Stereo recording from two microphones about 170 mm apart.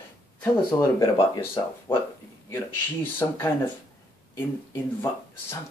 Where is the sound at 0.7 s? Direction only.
20° left (ahead or behind).